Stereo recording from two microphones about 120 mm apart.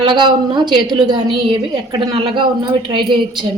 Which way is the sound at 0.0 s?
40° right (ahead or behind).